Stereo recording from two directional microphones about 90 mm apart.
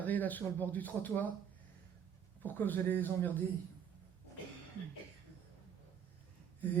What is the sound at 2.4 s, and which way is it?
A man's voice, 20° left (ahead or behind).